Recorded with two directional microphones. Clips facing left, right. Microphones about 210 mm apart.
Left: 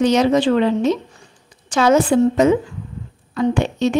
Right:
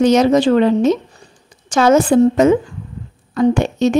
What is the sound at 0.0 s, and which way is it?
A woman's voice, 45° right (ahead or behind).